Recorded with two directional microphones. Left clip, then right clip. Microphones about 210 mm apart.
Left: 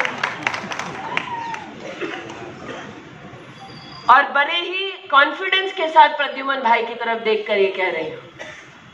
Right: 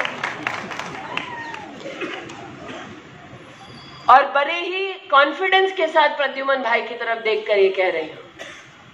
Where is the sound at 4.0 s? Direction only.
50° right (ahead or behind).